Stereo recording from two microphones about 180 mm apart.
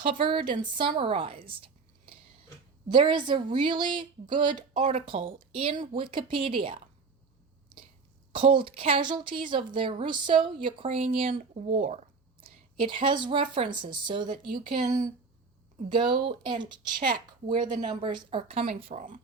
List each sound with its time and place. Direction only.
0.0 s speech: 50° right (ahead or behind)
0.8 s a woman's voice: 30° right (ahead or behind)
8.3 s a woman's voice: 30° right (ahead or behind)
14.3 s speech: 50° right (ahead or behind)
15.9 s speech: 25° right (ahead or behind)
17.6 s speech: 45° right (ahead or behind)
17.8 s a woman's voice: 25° right (ahead or behind)
18.9 s speech: 45° right (ahead or behind)